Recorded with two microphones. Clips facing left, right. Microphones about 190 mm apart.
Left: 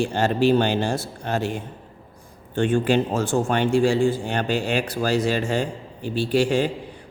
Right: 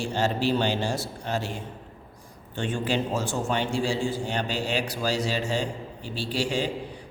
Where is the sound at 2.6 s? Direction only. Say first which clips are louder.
Left 8 dB; 55° left (ahead or behind).